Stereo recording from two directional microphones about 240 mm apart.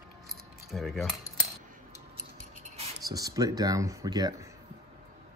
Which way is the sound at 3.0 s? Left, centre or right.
Centre.